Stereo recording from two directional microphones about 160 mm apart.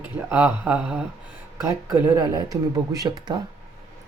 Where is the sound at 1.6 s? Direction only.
15° right (ahead or behind).